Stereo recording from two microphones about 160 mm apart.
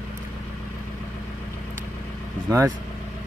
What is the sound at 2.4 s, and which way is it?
Speech, 20° right (ahead or behind).